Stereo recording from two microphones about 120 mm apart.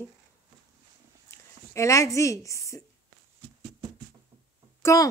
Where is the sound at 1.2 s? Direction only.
25° left (ahead or behind).